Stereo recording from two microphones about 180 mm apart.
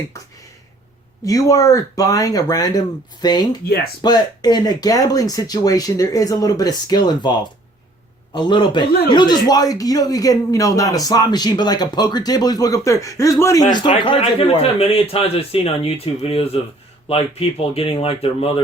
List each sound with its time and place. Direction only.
1.2 s a man's voice: 20° left (ahead or behind)
8.4 s a man's voice: 25° left (ahead or behind)